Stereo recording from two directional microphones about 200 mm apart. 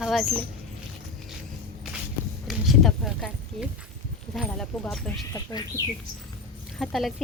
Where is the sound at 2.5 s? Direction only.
Centre (ahead or behind).